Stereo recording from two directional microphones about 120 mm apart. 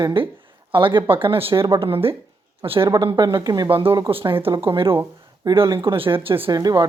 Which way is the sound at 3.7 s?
50° right (ahead or behind).